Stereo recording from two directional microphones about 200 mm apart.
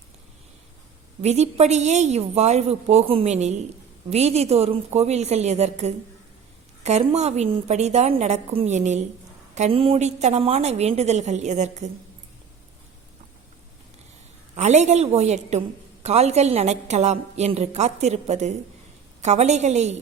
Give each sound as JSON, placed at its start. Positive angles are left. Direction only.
{"t": 1.2, "sound": "a woman's voice", "side_deg": -35}
{"t": 14.5, "sound": "a woman's voice", "side_deg": -35}